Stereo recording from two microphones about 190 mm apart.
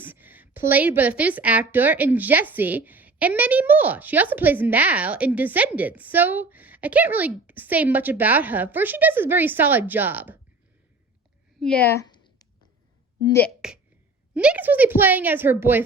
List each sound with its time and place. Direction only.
0.0 s a woman's voice: 10° right (ahead or behind)
11.6 s a woman's voice: 5° left (ahead or behind)
11.9 s a sound: 20° left (ahead or behind)
13.2 s speech: 10° left (ahead or behind)
13.5 s a woman's voice: 5° right (ahead or behind)